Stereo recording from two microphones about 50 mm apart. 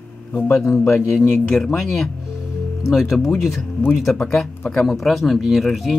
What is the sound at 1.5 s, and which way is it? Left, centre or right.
Speech, centre.